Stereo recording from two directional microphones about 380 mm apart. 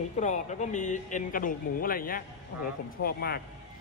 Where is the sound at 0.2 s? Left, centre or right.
Centre.